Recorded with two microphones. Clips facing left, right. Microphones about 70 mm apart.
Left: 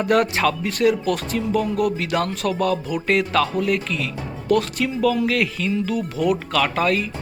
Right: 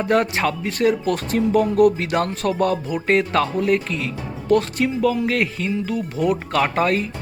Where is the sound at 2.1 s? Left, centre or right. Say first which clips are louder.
Right 1 dB; right.